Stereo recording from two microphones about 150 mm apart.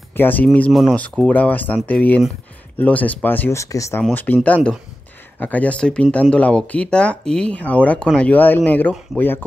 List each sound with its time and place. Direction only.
0.1 s speech: 15° left (ahead or behind)